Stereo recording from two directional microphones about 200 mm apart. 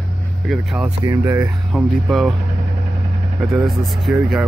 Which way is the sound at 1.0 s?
15° right (ahead or behind).